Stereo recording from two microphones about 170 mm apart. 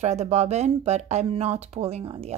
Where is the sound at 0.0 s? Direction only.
40° right (ahead or behind).